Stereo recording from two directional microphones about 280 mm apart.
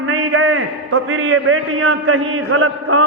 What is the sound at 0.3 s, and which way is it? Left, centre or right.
A man's voice, right.